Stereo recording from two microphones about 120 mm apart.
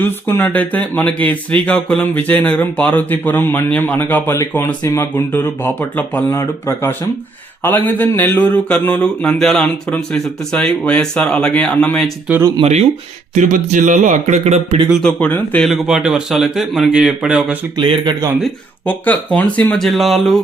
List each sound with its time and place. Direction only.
0.0 s speech: 15° left (ahead or behind)
12.3 s speech: 10° right (ahead or behind)
12.6 s speech: 65° right (ahead or behind)
13.3 s speech: 90° right; by 14.8 s 70° right (ahead or behind)
15.0 s speech: 10° left (ahead or behind); by 17.6 s 10° right (ahead or behind)
17.7 s speech: 45° right (ahead or behind)
18.9 s speech: 15° left (ahead or behind)